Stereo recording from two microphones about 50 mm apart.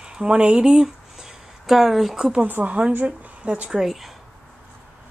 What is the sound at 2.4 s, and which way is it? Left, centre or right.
A woman's voice, right.